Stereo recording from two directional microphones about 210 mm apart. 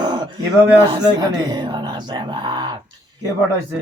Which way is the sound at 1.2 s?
20° right (ahead or behind).